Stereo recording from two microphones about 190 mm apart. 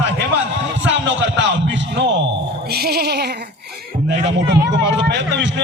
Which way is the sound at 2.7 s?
55° right (ahead or behind).